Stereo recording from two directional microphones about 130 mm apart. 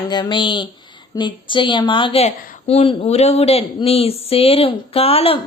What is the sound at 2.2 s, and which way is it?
A woman's voice, 50° left (ahead or behind).